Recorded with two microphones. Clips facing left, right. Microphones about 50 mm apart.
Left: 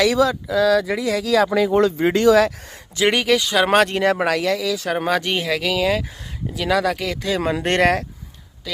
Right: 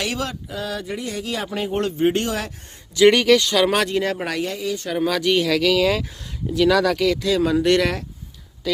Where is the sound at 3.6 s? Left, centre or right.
Left.